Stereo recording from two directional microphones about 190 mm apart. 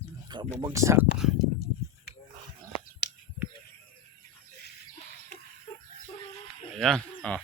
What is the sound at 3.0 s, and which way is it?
Whispering, 65° left (ahead or behind).